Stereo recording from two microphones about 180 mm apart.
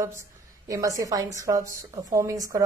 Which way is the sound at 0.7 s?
20° right (ahead or behind).